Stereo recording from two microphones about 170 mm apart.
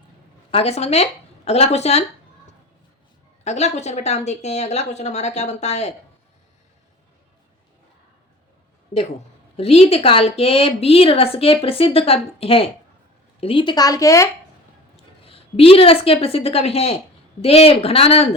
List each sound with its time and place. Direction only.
0.5 s speech: 35° left (ahead or behind)
3.4 s speech: 40° left (ahead or behind)
8.9 s speech: 45° left (ahead or behind)
9.6 s a woman's voice: 35° left (ahead or behind); by 14.3 s 20° left (ahead or behind)
15.3 s speech: 35° left (ahead or behind)